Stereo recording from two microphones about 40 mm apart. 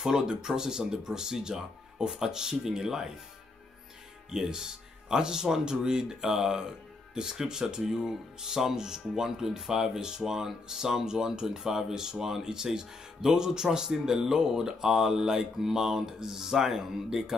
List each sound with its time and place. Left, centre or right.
0.0 s speech: centre
4.3 s speech: centre